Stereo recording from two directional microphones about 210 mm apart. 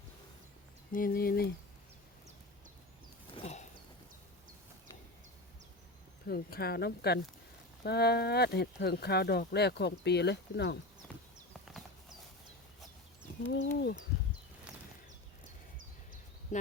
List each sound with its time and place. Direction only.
0.9 s speech: 45° left (ahead or behind)
3.3 s horse: 30° left (ahead or behind)
6.2 s speech: 45° left (ahead or behind)
11.1 s horse: 5° left (ahead or behind)
13.5 s speech: 55° left (ahead or behind)